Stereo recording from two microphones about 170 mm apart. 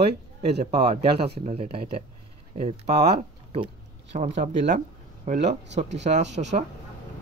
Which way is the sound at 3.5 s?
35° right (ahead or behind).